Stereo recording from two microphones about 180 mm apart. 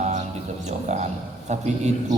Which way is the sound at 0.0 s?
40° right (ahead or behind).